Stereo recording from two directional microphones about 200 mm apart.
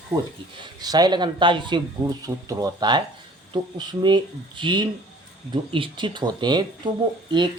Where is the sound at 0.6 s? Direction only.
20° right (ahead or behind).